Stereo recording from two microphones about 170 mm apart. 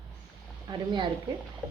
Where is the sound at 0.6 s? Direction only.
25° right (ahead or behind).